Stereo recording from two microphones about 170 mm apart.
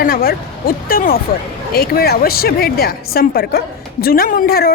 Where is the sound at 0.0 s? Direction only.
60° left (ahead or behind).